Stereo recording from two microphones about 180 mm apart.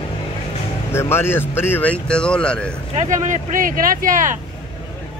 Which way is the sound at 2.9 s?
45° right (ahead or behind).